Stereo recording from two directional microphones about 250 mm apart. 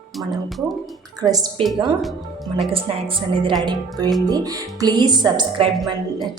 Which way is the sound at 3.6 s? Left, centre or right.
Centre.